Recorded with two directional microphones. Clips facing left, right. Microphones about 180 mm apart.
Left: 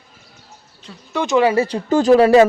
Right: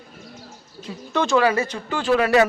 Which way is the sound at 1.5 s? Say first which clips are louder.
Left 8 dB; 35° left (ahead or behind).